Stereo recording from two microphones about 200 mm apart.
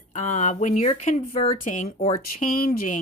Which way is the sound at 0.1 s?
40° left (ahead or behind).